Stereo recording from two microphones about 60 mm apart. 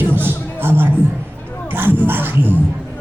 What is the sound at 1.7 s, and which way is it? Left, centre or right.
Music, right.